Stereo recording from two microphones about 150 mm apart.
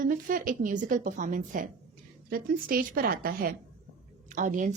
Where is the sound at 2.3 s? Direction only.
75° right (ahead or behind).